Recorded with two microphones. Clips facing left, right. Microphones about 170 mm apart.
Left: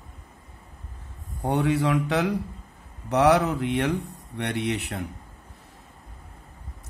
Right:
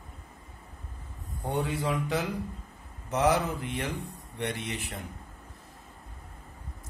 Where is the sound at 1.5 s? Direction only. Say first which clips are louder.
Left 7 dB; 75° left (ahead or behind).